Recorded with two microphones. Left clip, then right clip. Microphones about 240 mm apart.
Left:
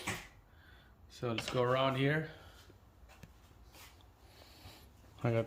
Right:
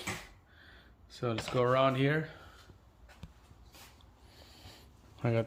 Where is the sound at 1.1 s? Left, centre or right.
Centre.